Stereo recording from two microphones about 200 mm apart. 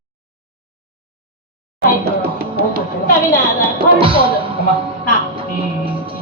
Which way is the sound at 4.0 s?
25° right (ahead or behind).